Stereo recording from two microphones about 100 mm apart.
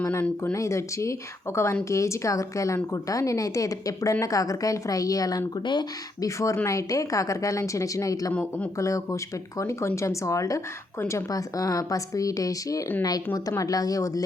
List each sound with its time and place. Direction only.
0.0 s speech: 30° left (ahead or behind)
6.2 s speech: 35° left (ahead or behind)
8.3 s speech: 15° left (ahead or behind)
8.8 s speech: 30° left (ahead or behind)